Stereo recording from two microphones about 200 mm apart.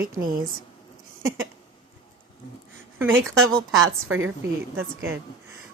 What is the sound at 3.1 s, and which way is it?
A woman's voice, 90° right.